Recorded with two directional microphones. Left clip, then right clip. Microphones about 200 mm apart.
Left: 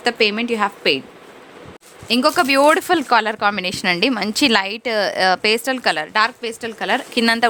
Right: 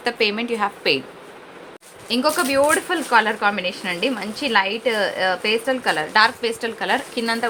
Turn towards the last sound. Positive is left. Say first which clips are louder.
# left 4 dB
turn(degrees=40)  # may be behind; listen again after turning